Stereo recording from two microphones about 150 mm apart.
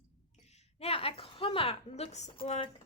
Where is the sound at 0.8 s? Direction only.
40° left (ahead or behind).